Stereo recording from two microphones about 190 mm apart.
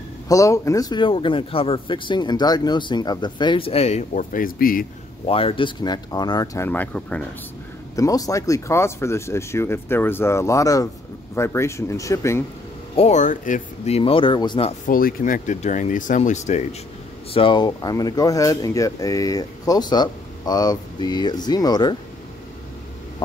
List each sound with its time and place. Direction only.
0.3 s speech: 15° left (ahead or behind); by 4.8 s 50° left (ahead or behind)
5.2 s speech: 30° left (ahead or behind); by 7.2 s 5° left (ahead or behind)
7.9 s speech: 20° left (ahead or behind)
12.9 s speech: 35° left (ahead or behind)
14.9 s speech: 50° left (ahead or behind)
17.3 s speech: 25° left (ahead or behind)